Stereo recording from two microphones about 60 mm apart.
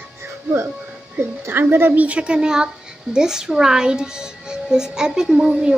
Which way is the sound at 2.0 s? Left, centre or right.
Right.